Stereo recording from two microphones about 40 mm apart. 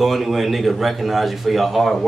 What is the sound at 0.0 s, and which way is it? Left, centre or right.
Speech, centre.